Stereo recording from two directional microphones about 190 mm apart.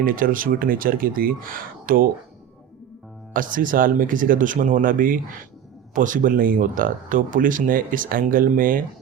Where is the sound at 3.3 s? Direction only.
45° right (ahead or behind).